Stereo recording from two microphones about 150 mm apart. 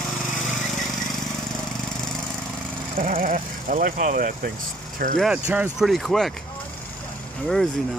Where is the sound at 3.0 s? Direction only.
70° right (ahead or behind).